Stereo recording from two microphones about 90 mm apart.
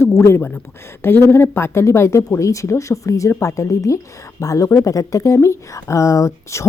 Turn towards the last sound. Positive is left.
turn(degrees=35)  # may be behind; listen again after turning